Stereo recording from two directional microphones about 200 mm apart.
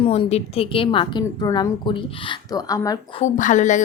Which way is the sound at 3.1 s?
40° left (ahead or behind).